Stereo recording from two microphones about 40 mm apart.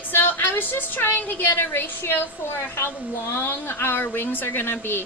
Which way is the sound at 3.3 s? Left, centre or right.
Left.